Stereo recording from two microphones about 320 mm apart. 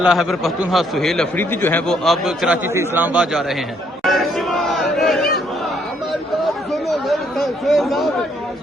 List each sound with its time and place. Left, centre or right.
0.0 s a man's voice: centre
4.0 s crowd: centre
6.4 s chatter: centre